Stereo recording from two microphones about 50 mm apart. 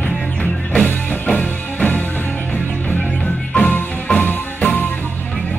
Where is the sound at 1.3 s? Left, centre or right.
Left.